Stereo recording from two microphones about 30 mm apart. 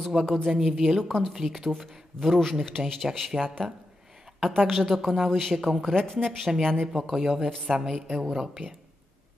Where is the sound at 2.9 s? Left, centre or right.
Centre.